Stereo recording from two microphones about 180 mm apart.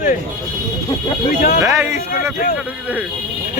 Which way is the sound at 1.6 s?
15° right (ahead or behind).